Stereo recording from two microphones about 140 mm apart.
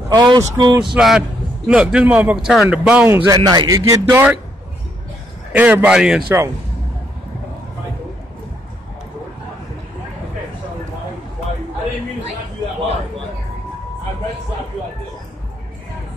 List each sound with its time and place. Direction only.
0.1 s speech: 30° right (ahead or behind)
0.9 s a man's voice: 5° right (ahead or behind)
3.3 s a man's voice: 30° right (ahead or behind)
5.5 s a man's voice: 10° right (ahead or behind)